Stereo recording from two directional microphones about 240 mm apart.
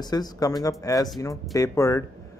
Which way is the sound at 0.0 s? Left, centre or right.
Centre.